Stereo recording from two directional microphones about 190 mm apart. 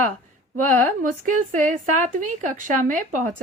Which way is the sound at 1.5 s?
45° right (ahead or behind).